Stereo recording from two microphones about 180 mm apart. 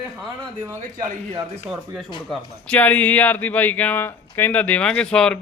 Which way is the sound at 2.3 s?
5° left (ahead or behind).